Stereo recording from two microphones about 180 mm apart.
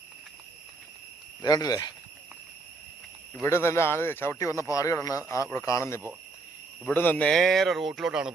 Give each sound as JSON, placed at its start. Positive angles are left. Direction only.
{"t": 1.4, "sound": "speech", "side_deg": 20}
{"t": 3.4, "sound": "speech", "side_deg": 15}